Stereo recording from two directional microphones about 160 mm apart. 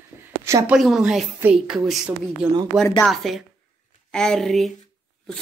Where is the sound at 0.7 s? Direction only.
Centre (ahead or behind).